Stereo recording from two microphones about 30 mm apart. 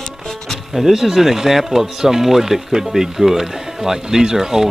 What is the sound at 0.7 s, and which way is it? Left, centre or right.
Speech, centre.